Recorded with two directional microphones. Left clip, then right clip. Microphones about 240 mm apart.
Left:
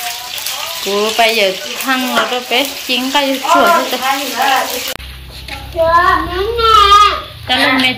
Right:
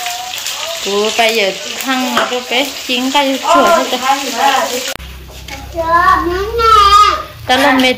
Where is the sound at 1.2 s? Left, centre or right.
Centre.